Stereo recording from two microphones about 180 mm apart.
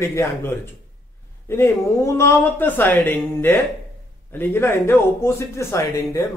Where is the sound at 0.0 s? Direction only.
15° left (ahead or behind).